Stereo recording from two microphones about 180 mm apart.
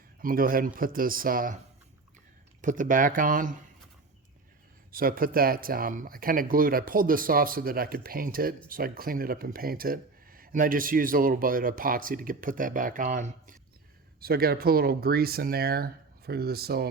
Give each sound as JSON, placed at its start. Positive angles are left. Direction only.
{"t": 0.2, "sound": "speech", "side_deg": -50}
{"t": 2.6, "sound": "speech", "side_deg": -45}
{"t": 4.9, "sound": "speech", "side_deg": -55}
{"t": 14.2, "sound": "speech", "side_deg": -55}